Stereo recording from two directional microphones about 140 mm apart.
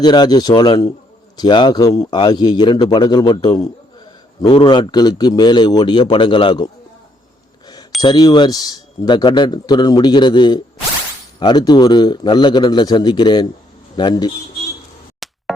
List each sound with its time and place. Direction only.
0.0 s a man's voice: 30° left (ahead or behind)
8.0 s a man's voice: 30° left (ahead or behind)
15.2 s music: centre (ahead or behind)